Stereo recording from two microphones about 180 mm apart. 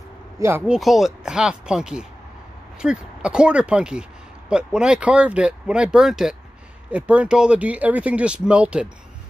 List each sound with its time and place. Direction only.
0.4 s speech: 15° right (ahead or behind)
0.7 s speech: centre (ahead or behind)